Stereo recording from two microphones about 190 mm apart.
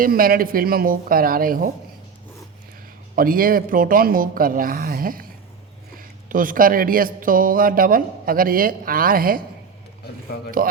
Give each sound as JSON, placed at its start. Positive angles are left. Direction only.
{"t": 0.0, "sound": "speech", "side_deg": -50}
{"t": 3.2, "sound": "speech", "side_deg": -50}
{"t": 6.2, "sound": "speech", "side_deg": -45}